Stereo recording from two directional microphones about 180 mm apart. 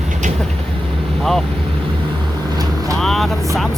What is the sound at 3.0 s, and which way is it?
Vehicle, centre (ahead or behind).